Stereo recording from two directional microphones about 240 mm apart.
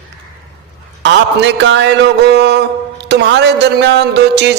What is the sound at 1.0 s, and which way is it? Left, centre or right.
A man's voice, right.